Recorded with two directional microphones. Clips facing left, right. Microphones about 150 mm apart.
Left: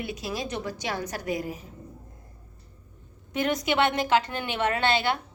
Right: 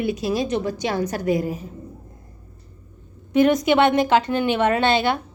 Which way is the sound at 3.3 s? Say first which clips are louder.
Right 9 dB; 20° right (ahead or behind).